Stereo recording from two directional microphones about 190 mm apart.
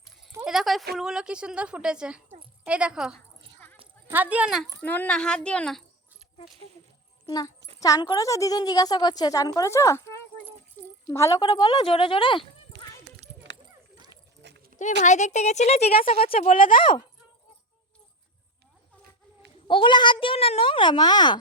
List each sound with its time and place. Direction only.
0.4 s a sound: centre (ahead or behind)
0.9 s a woman's voice: 5° right (ahead or behind)
4.8 s a woman's voice: 10° left (ahead or behind)
7.3 s a child's voice: 20° left (ahead or behind)
15.0 s speech: 40° left (ahead or behind)
16.5 s speech: 45° left (ahead or behind)
19.6 s a woman's voice: 25° left (ahead or behind)